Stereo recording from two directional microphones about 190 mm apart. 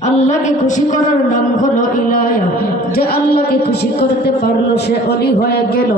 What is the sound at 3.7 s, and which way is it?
A man's voice, 60° left (ahead or behind).